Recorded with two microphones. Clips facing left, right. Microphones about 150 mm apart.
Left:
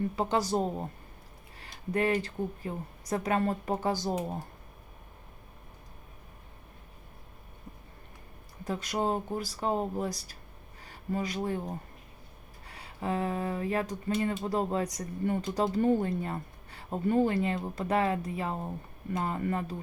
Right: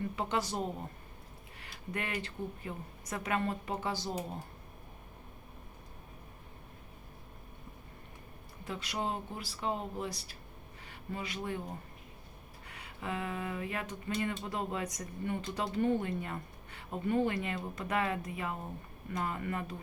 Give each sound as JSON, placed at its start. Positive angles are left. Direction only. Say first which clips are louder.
{"t": 0.2, "sound": "a woman's voice", "louder": "left 6 dB", "side_deg": 35}
{"t": 8.6, "sound": "speech", "louder": "left 6 dB", "side_deg": 40}
{"t": 12.6, "sound": "a woman's voice", "louder": "left 6 dB", "side_deg": 35}